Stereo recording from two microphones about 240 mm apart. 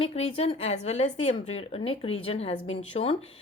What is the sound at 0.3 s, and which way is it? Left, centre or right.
A woman's voice, left.